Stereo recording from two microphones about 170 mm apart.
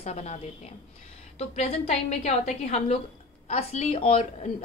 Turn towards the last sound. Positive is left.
turn(degrees=35)  # may be behind; listen again after turning